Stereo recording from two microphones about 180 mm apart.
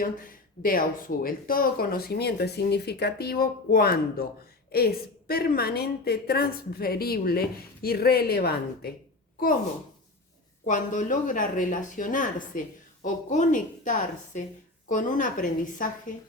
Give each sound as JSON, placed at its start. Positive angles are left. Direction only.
{"t": 0.0, "sound": "speech", "side_deg": 50}
{"t": 10.7, "sound": "speech", "side_deg": 45}